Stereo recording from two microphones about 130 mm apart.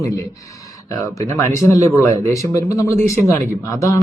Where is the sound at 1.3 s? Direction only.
25° left (ahead or behind).